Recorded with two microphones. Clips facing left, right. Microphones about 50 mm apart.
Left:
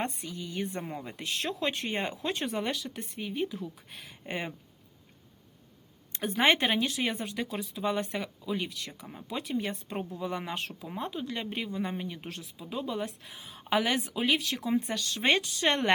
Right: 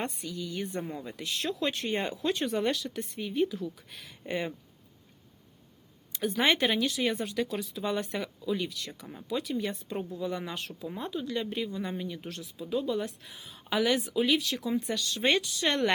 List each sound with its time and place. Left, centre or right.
0.0 s speech: left
1.1 s speech: left
1.9 s speech: centre
3.6 s speech: left
6.1 s speech: left